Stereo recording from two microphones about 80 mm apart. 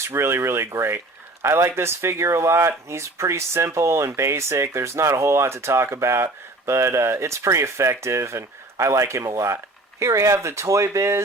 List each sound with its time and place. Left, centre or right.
0.0 s speech: right